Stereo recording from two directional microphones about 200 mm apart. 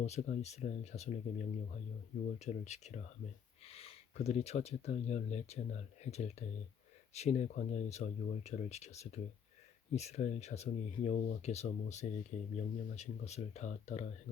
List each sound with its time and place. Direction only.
0.0 s speech: 35° left (ahead or behind)